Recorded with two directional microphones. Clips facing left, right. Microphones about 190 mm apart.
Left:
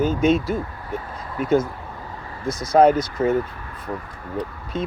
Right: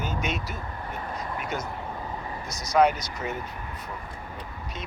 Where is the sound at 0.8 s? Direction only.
20° right (ahead or behind).